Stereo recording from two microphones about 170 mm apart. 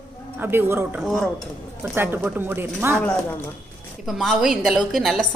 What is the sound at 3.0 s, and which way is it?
A woman's voice, 5° left (ahead or behind).